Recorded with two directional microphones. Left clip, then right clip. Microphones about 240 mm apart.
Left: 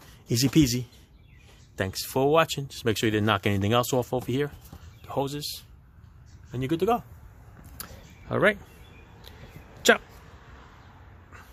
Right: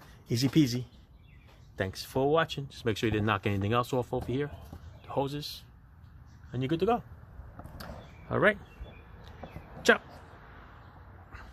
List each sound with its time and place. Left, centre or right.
0.3 s speech: centre
8.3 s speech: centre
9.8 s speech: centre